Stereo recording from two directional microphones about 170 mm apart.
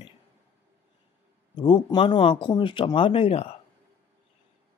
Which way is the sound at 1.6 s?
30° left (ahead or behind).